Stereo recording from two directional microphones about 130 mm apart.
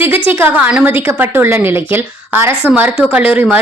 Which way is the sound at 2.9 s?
5° right (ahead or behind).